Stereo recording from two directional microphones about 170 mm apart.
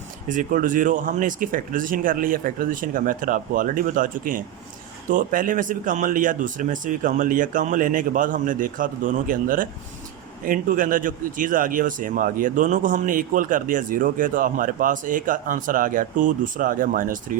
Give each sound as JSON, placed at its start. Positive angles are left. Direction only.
{"t": 0.3, "sound": "speech", "side_deg": -50}